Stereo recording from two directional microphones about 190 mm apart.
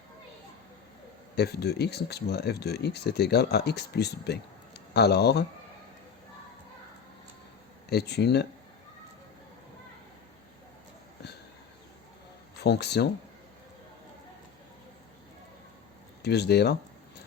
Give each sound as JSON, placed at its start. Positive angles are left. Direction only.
{"t": 1.4, "sound": "speech", "side_deg": 60}
{"t": 7.9, "sound": "speech", "side_deg": 60}
{"t": 12.6, "sound": "speech", "side_deg": 60}
{"t": 16.2, "sound": "speech", "side_deg": 60}